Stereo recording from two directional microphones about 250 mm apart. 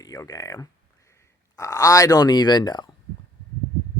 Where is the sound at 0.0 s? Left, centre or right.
Centre.